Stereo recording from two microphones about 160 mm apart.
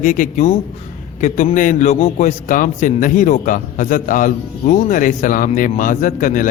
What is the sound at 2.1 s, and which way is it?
A man's voice, 55° left (ahead or behind).